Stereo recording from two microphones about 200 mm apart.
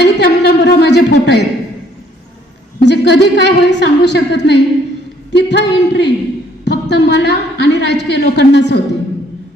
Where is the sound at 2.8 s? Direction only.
60° left (ahead or behind).